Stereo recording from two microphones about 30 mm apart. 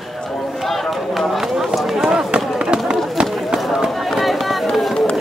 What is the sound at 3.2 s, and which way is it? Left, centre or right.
Run, right.